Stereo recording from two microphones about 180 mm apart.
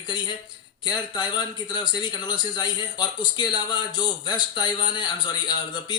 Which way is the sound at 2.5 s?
25° left (ahead or behind).